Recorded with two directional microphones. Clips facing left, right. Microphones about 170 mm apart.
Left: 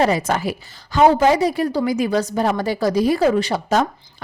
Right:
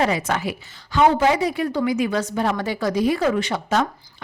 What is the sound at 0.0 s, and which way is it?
A woman's voice, 40° left (ahead or behind).